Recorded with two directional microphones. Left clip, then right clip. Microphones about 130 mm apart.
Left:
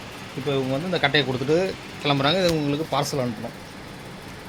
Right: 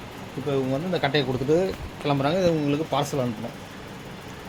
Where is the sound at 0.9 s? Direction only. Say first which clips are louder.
Left 4 dB; 5° left (ahead or behind).